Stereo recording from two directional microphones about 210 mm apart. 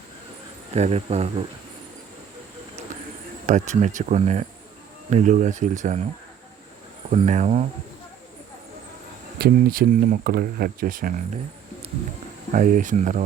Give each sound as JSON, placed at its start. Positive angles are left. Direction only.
{"t": 0.7, "sound": "speech", "side_deg": -30}
{"t": 3.4, "sound": "speech", "side_deg": -35}
{"t": 7.1, "sound": "speech", "side_deg": -30}
{"t": 9.4, "sound": "speech", "side_deg": -45}
{"t": 12.5, "sound": "speech", "side_deg": -40}